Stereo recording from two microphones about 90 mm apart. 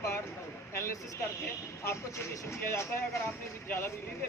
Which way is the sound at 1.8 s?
30° left (ahead or behind).